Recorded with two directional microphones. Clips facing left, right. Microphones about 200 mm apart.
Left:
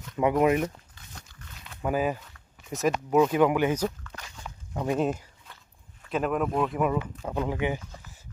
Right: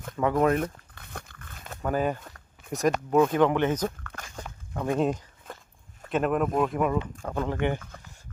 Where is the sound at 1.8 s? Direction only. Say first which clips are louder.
Even; 5° left (ahead or behind).